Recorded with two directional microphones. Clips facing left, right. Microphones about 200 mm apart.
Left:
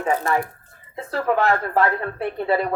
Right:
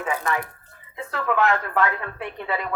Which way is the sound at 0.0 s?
40° left (ahead or behind).